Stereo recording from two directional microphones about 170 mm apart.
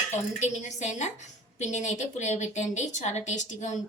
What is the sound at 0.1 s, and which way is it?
A woman's voice, 45° left (ahead or behind).